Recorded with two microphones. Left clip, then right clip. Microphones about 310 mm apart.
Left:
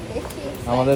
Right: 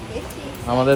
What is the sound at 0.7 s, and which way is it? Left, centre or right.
Speech, right.